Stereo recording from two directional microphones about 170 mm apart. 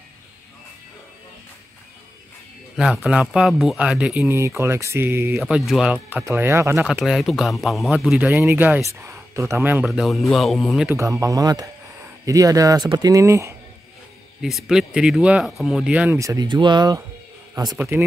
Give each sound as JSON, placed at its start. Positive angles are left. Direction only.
{"t": 2.8, "sound": "speech", "side_deg": -5}
{"t": 4.4, "sound": "a man's voice", "side_deg": -15}
{"t": 6.9, "sound": "a man's voice", "side_deg": 0}
{"t": 9.8, "sound": "speech", "side_deg": 0}
{"t": 11.0, "sound": "speech", "side_deg": -20}
{"t": 14.4, "sound": "speech", "side_deg": 0}
{"t": 16.2, "sound": "a man's voice", "side_deg": -20}